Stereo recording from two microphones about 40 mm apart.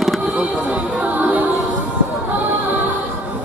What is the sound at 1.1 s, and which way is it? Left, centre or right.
Music, right.